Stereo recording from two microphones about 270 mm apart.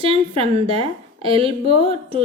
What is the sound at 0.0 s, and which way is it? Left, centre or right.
A woman's voice, right.